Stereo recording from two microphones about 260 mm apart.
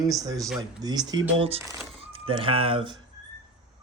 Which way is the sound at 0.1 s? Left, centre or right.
Centre.